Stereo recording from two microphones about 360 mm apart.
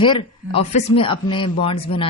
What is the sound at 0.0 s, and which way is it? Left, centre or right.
Speech, centre.